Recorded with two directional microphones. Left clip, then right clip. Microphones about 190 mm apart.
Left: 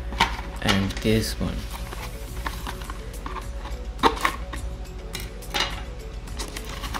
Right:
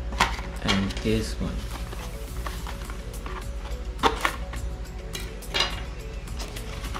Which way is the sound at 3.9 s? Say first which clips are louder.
Left 2 dB; 10° left (ahead or behind).